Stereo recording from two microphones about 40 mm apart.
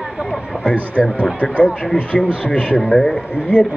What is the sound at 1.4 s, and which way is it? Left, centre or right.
A man's voice, left.